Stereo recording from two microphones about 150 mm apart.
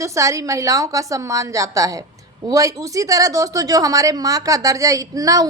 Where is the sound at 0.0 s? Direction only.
20° right (ahead or behind).